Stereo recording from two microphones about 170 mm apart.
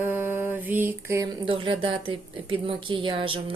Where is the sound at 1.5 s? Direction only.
30° right (ahead or behind).